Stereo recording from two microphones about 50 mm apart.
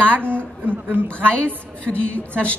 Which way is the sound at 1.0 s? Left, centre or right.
Left.